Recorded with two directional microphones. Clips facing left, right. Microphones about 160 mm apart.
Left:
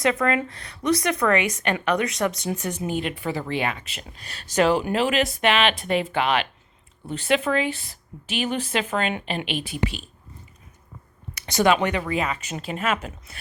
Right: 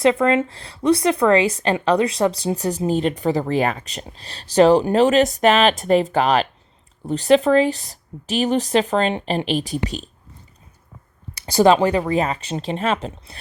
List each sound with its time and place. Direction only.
0.0 s speech: 25° right (ahead or behind)
11.3 s speech: 30° right (ahead or behind)